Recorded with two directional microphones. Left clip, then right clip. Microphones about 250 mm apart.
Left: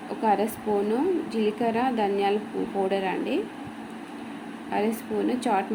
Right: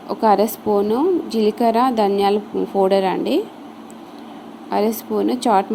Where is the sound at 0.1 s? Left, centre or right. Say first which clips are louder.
Right 9 dB; right.